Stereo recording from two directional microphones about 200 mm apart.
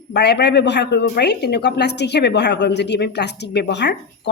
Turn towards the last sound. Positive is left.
turn(degrees=60)  # may be behind; listen again after turning